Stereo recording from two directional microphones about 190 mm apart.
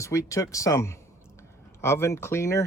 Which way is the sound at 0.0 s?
15° left (ahead or behind).